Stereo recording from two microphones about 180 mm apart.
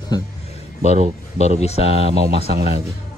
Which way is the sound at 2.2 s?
60° right (ahead or behind).